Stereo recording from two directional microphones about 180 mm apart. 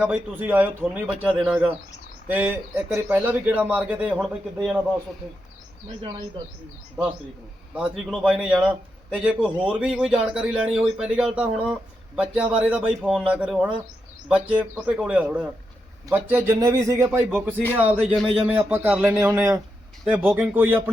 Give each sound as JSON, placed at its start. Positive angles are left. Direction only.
{"t": 0.0, "sound": "speech", "side_deg": -10}
{"t": 7.7, "sound": "a man's voice", "side_deg": -5}
{"t": 17.1, "sound": "speech", "side_deg": -5}